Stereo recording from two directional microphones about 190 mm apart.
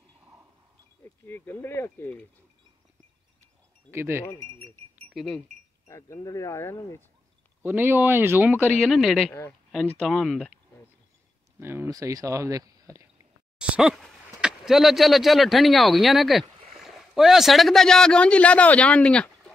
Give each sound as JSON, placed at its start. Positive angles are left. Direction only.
{"t": 0.2, "sound": "wind chime", "side_deg": -10}
{"t": 1.0, "sound": "speech", "side_deg": 10}
{"t": 3.9, "sound": "speech", "side_deg": -10}
{"t": 5.1, "sound": "speech", "side_deg": 0}
{"t": 5.9, "sound": "speech", "side_deg": 15}
{"t": 7.6, "sound": "speech", "side_deg": -10}
{"t": 8.5, "sound": "speech", "side_deg": 0}
{"t": 11.6, "sound": "speech", "side_deg": -15}
{"t": 13.6, "sound": "speech", "side_deg": -5}